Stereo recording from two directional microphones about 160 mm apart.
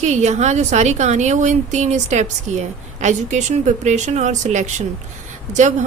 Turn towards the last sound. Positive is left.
turn(degrees=-50)  # may be behind; listen again after turning